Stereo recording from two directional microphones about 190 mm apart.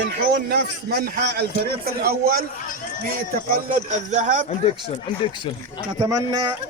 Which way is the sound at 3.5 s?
45° right (ahead or behind).